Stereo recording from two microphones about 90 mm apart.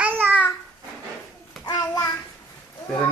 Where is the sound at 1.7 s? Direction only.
45° left (ahead or behind).